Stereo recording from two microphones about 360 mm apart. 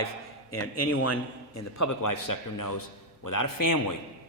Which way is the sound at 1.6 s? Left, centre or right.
Left.